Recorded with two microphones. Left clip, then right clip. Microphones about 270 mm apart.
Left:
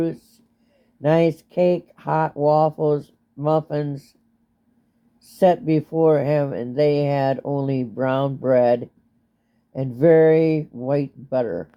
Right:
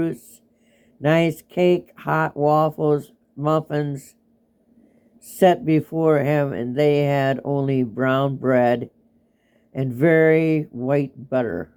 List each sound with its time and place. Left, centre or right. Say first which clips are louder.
1.0 s speech: left 1 dB; right
5.4 s speech: right 1 dB; right